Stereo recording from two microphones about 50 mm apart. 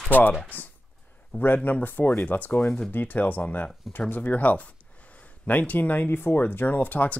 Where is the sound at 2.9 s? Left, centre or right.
Left.